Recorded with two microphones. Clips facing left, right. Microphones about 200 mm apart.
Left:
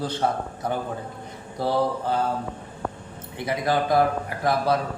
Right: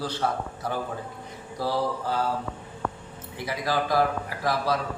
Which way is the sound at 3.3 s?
25° left (ahead or behind).